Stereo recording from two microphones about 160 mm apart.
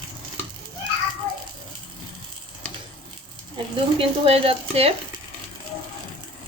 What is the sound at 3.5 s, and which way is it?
Speech, 35° right (ahead or behind).